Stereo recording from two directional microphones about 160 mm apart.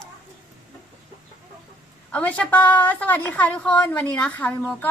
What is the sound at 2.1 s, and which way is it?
A woman's voice, 10° left (ahead or behind).